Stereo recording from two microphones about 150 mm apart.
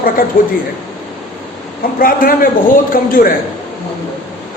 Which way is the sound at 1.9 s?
70° left (ahead or behind).